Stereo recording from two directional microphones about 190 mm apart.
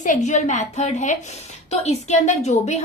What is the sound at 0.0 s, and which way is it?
A woman's voice, 40° left (ahead or behind).